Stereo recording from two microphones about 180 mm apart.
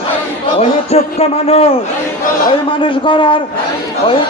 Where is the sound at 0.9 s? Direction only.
35° left (ahead or behind).